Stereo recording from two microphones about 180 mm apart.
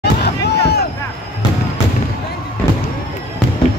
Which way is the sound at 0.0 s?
65° left (ahead or behind).